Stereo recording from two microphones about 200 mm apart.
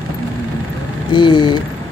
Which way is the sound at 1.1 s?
20° left (ahead or behind).